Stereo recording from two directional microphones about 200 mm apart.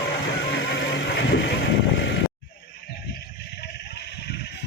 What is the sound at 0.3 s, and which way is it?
Vehicle, 65° left (ahead or behind).